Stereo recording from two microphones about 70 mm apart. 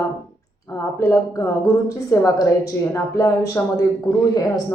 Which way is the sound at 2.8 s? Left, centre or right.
Left.